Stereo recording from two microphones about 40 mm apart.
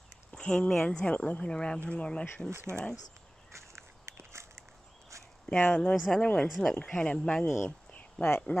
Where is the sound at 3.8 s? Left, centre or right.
Right.